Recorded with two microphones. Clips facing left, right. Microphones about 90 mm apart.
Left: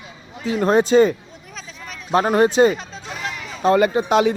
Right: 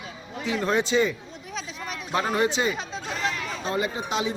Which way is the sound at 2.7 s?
5° right (ahead or behind).